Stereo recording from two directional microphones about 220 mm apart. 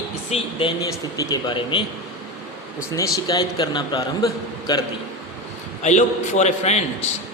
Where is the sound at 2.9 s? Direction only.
15° left (ahead or behind).